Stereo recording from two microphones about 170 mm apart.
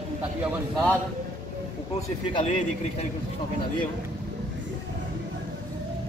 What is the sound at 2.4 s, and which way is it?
Speech, 40° left (ahead or behind).